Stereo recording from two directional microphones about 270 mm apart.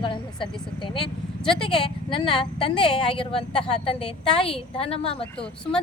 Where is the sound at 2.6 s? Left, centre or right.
Centre.